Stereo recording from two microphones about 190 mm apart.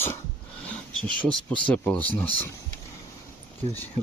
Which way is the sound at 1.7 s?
10° left (ahead or behind).